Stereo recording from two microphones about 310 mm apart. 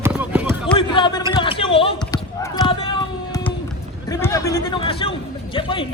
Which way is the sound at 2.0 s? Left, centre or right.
Centre.